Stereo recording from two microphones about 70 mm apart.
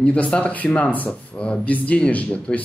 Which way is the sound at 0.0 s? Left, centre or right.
Centre.